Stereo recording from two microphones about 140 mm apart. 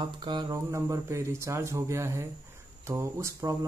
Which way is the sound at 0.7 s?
20° right (ahead or behind).